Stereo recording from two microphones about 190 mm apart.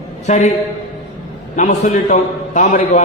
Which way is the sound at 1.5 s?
40° left (ahead or behind).